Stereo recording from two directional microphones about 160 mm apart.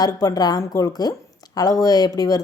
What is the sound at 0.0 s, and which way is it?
Speech, 25° left (ahead or behind).